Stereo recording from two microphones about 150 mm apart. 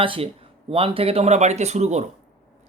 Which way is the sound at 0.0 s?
35° right (ahead or behind).